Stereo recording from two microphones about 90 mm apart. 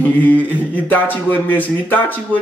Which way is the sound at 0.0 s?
20° left (ahead or behind).